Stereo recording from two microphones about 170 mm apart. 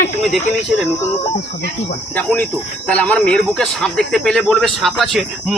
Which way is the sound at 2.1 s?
5° left (ahead or behind).